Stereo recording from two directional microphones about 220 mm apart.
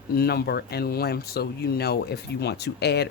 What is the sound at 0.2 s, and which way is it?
Speech, 45° left (ahead or behind).